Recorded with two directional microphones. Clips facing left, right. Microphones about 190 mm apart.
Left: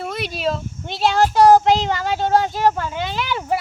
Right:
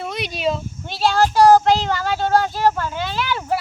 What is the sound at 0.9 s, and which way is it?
Speech, 20° left (ahead or behind).